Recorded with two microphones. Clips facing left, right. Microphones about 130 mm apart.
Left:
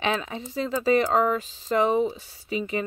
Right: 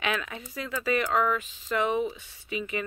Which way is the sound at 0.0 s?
30° left (ahead or behind).